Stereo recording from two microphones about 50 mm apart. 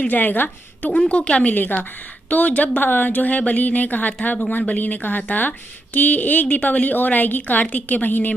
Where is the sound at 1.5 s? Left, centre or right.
Left.